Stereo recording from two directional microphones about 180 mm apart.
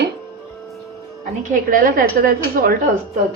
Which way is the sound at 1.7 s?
50° right (ahead or behind).